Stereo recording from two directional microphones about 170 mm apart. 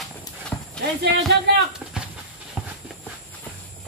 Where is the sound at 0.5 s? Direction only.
5° left (ahead or behind).